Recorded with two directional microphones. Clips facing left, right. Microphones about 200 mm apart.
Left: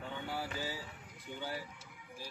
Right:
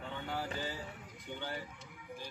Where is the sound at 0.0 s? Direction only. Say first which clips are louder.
Even; 10° left (ahead or behind).